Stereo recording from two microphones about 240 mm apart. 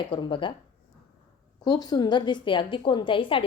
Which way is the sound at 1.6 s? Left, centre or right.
Centre.